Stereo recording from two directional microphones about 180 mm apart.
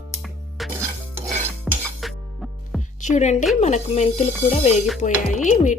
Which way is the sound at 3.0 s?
40° left (ahead or behind).